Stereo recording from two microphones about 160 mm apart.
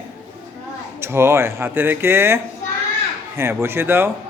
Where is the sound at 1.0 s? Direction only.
15° right (ahead or behind).